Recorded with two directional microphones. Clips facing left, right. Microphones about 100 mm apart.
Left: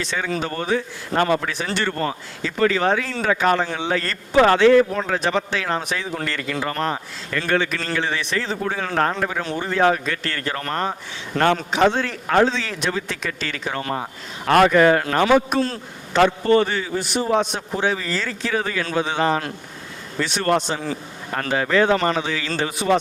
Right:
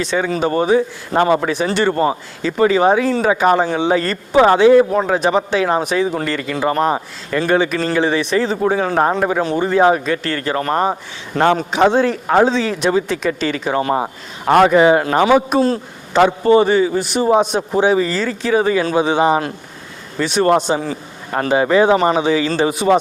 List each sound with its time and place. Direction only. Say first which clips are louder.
0.0 s speech: right 7 dB; 15° right (ahead or behind)